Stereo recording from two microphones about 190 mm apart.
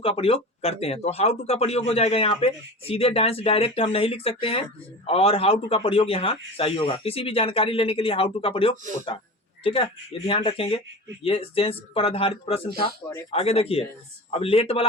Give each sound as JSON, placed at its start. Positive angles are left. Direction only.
{"t": 0.0, "sound": "a man's voice", "side_deg": 30}